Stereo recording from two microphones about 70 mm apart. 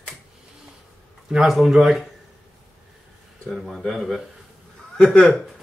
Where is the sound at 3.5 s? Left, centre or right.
Centre.